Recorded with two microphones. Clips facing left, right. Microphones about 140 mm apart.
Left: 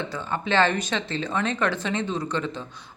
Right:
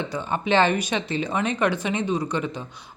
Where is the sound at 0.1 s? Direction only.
15° right (ahead or behind).